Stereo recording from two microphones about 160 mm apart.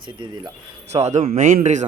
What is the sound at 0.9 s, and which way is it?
Speech, 45° right (ahead or behind).